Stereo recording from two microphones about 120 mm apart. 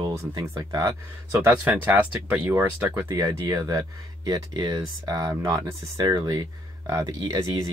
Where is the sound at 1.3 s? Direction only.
15° right (ahead or behind).